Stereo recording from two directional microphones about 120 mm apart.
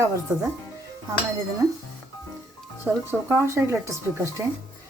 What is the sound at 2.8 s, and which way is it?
Speech, 15° right (ahead or behind).